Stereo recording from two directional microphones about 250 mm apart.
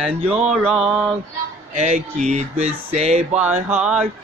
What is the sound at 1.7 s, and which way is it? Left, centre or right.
Speech, right.